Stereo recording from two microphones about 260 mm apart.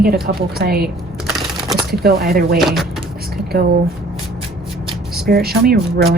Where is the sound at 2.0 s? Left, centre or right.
Right.